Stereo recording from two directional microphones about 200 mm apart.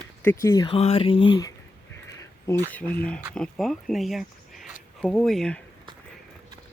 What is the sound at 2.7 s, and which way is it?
Speech, 10° left (ahead or behind).